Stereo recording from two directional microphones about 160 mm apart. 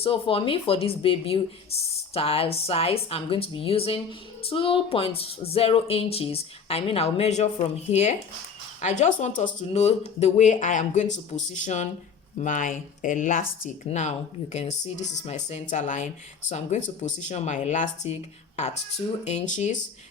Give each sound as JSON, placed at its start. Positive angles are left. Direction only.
{"t": 0.0, "sound": "a woman's voice", "side_deg": 35}
{"t": 13.8, "sound": "speech", "side_deg": 45}